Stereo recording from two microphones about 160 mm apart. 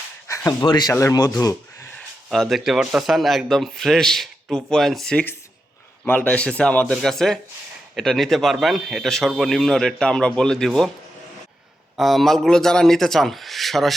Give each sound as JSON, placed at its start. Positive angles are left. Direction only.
{"t": 0.3, "sound": "a sound", "side_deg": 15}
{"t": 0.6, "sound": "speech", "side_deg": 25}
{"t": 2.0, "sound": "speech", "side_deg": 0}
{"t": 11.9, "sound": "speech", "side_deg": 0}